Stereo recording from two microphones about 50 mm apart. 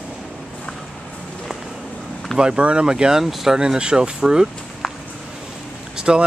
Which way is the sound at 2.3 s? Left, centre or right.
Centre.